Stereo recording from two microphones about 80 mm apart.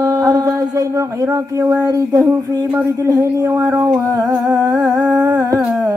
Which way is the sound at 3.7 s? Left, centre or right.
Right.